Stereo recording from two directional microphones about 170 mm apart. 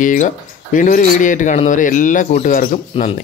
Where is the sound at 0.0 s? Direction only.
50° left (ahead or behind).